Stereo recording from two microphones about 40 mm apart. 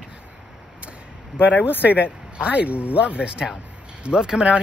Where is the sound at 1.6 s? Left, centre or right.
Right.